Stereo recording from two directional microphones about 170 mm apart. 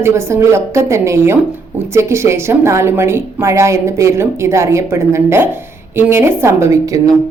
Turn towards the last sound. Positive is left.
turn(degrees=-20)  # may be behind; listen again after turning